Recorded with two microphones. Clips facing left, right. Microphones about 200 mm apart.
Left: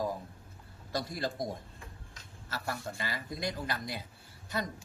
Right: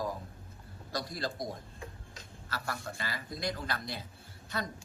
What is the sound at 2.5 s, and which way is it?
A man's voice, 20° left (ahead or behind).